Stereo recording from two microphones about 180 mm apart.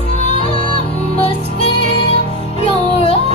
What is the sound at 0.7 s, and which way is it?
Music, 30° left (ahead or behind).